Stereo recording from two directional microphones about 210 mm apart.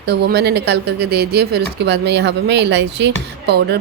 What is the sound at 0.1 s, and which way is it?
Speech, 50° right (ahead or behind).